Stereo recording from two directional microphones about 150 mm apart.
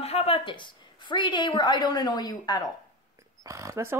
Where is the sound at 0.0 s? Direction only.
40° left (ahead or behind); by 2.7 s 25° left (ahead or behind).